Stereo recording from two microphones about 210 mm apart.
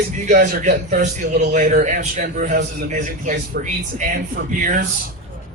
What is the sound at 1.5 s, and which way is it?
A man's voice, 35° right (ahead or behind).